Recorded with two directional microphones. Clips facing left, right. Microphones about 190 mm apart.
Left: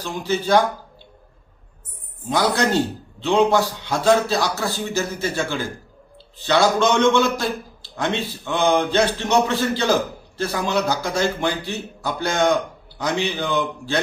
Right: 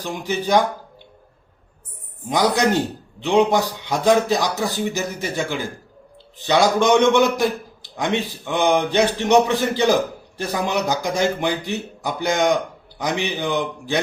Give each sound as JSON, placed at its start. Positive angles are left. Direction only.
{"t": 0.0, "sound": "a man's voice", "side_deg": -15}
{"t": 2.3, "sound": "a man's voice", "side_deg": -15}